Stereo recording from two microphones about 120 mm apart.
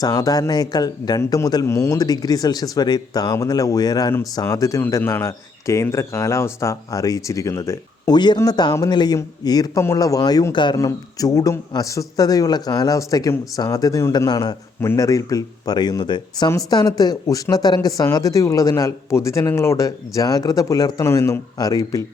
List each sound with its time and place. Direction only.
0.0 s a man's voice: 30° left (ahead or behind)
1.2 s a man's voice: 20° left (ahead or behind)
8.1 s a man's voice: 40° left (ahead or behind)
10.8 s a man's voice: 30° left (ahead or behind)